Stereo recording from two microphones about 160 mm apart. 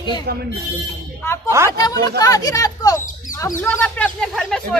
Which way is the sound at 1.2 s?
15° left (ahead or behind).